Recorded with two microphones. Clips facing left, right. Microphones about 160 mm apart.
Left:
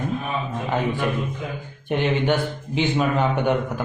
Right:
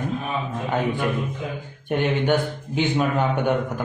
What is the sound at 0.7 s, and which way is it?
A man's voice, centre (ahead or behind).